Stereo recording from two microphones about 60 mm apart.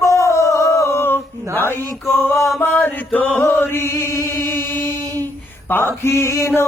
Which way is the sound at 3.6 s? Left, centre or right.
Left.